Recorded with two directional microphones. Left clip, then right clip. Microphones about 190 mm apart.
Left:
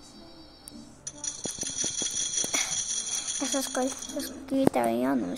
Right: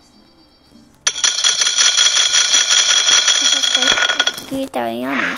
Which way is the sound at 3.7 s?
15° right (ahead or behind).